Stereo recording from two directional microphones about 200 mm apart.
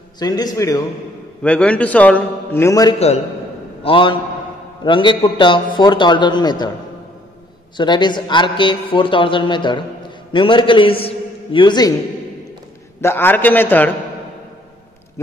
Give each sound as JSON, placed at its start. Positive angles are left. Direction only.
{"t": 0.2, "sound": "a man's voice", "side_deg": 20}
{"t": 7.7, "sound": "a man's voice", "side_deg": 20}
{"t": 13.0, "sound": "a man's voice", "side_deg": 10}